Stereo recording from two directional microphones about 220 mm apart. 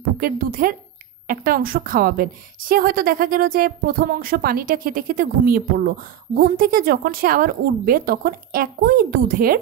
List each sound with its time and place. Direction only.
0.2 s speech: 40° right (ahead or behind)